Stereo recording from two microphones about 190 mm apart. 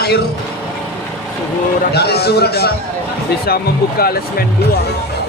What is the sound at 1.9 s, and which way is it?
A man's voice, 55° left (ahead or behind).